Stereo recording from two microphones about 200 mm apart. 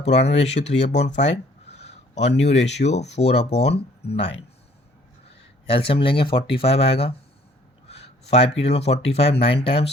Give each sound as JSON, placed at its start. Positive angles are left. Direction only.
{"t": 0.0, "sound": "speech", "side_deg": 35}
{"t": 5.6, "sound": "speech", "side_deg": 30}
{"t": 7.9, "sound": "a sound", "side_deg": 30}
{"t": 8.6, "sound": "speech", "side_deg": 30}